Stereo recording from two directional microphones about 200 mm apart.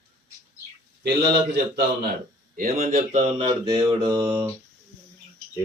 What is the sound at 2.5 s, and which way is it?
Speech, 40° right (ahead or behind).